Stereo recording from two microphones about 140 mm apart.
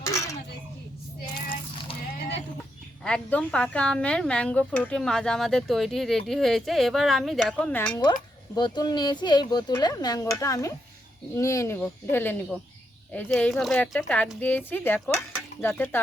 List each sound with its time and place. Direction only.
0.0 s speech: 20° left (ahead or behind)
3.0 s speech: 10° left (ahead or behind)
7.7 s speech: 10° left (ahead or behind)
7.9 s speech: 30° left (ahead or behind)